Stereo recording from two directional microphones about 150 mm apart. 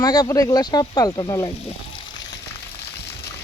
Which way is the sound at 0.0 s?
25° left (ahead or behind).